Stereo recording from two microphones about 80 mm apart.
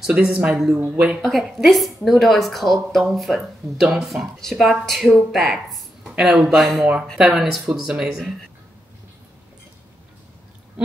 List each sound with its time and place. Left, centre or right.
0.0 s speech: centre
1.2 s a woman's voice: centre